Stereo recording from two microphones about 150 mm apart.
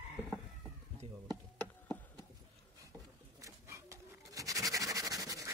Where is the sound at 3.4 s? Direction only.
20° right (ahead or behind).